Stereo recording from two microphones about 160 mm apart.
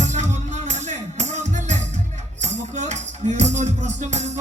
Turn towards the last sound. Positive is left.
turn(degrees=-45)  # may be behind; listen again after turning